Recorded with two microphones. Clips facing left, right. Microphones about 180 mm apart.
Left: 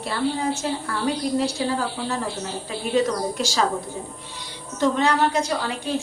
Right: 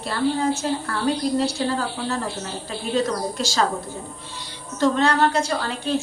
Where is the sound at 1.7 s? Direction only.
10° left (ahead or behind).